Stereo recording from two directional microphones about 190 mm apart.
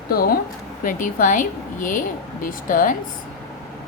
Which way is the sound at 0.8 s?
45° left (ahead or behind).